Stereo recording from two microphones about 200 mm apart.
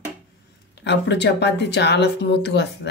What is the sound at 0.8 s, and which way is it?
Speech, 60° left (ahead or behind).